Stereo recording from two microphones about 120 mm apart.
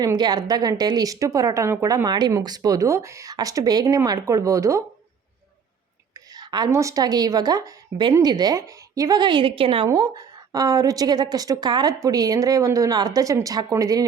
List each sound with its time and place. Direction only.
0.0 s speech: 30° right (ahead or behind)
6.3 s a sound: 35° right (ahead or behind)
6.7 s a woman's voice: 25° right (ahead or behind); by 9.9 s 45° right (ahead or behind)
9.9 s a woman's voice: 30° right (ahead or behind)